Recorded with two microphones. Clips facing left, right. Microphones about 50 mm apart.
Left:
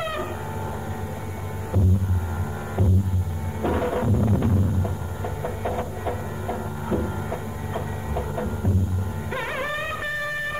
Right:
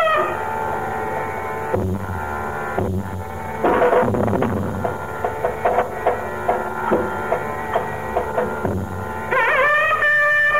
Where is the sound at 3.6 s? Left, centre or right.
Right.